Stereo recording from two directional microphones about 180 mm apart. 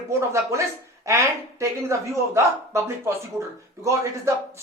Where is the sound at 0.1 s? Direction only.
15° right (ahead or behind).